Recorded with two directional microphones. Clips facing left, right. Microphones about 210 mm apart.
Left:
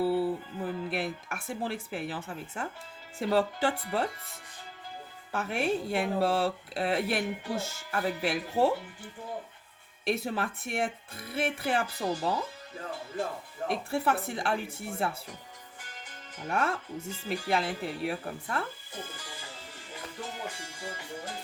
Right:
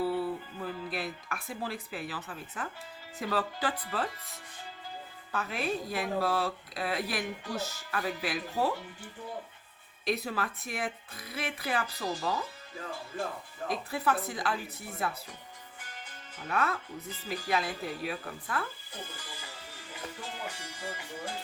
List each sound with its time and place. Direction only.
0.0 s speech: 25° left (ahead or behind)
5.3 s speech: 25° left (ahead or behind)
10.1 s speech: 25° left (ahead or behind)
13.9 s speech: 30° left (ahead or behind)
16.5 s speech: 25° left (ahead or behind)